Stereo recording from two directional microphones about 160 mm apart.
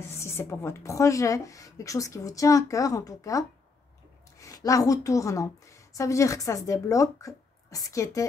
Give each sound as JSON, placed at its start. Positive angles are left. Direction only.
{"t": 0.0, "sound": "a woman's voice", "side_deg": 15}